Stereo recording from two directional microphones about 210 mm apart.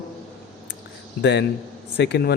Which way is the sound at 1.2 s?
55° left (ahead or behind).